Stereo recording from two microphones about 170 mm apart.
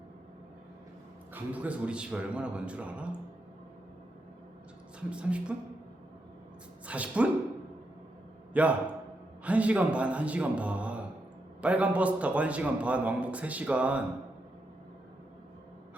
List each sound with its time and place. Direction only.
1.3 s a man's voice: 10° right (ahead or behind)
4.9 s a man's voice: 5° right (ahead or behind)
6.8 s speech: 10° right (ahead or behind)
8.5 s a man's voice: 10° right (ahead or behind)